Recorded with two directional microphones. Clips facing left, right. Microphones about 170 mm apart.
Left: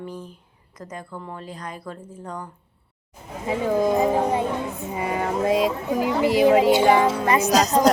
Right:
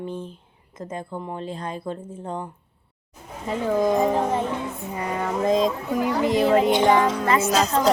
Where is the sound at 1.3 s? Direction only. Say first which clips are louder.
Right 5 dB; 25° right (ahead or behind).